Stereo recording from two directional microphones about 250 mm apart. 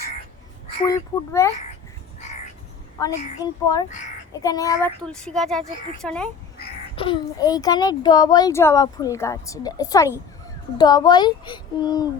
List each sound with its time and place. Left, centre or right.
0.9 s a child's voice: centre
3.0 s a child's voice: centre
5.0 s a child's voice: centre
6.9 s a child's voice: centre